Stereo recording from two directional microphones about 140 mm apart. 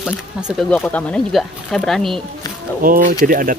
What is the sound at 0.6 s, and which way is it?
Speech, 10° left (ahead or behind).